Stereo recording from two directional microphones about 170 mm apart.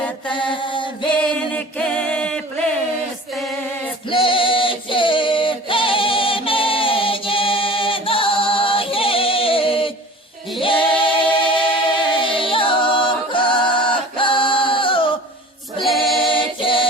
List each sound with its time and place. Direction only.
0.3 s mantra: 30° left (ahead or behind)
1.1 s music: 10° left (ahead or behind)
4.1 s a sound: 30° left (ahead or behind)
10.6 s a capella: 30° left (ahead or behind)
15.8 s choir: centre (ahead or behind)
16.3 s a capella: 30° left (ahead or behind)